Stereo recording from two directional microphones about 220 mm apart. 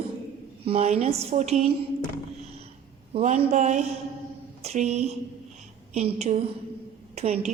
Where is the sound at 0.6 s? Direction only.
30° right (ahead or behind).